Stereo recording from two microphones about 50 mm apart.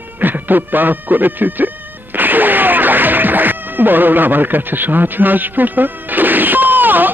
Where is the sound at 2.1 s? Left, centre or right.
Right.